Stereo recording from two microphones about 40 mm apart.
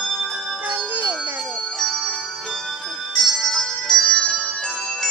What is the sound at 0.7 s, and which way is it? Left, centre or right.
Music, right.